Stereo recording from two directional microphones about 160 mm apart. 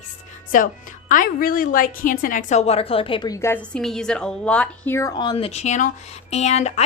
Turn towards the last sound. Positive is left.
turn(degrees=45)  # may be behind; listen again after turning